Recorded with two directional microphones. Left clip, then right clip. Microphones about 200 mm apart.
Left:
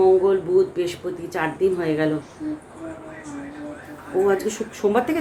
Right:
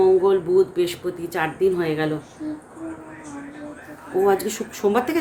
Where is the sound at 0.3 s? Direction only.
15° right (ahead or behind).